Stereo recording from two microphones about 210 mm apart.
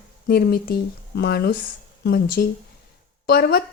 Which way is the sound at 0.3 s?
45° left (ahead or behind).